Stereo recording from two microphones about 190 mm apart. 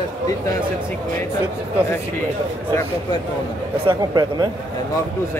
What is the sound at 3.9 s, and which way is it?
Speech, 20° right (ahead or behind).